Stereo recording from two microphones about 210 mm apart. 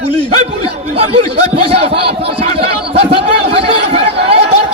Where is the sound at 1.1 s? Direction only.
25° right (ahead or behind).